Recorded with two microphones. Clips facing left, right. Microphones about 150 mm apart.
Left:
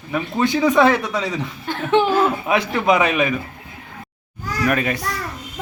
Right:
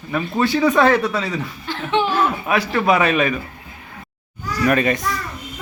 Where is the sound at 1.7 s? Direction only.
45° left (ahead or behind).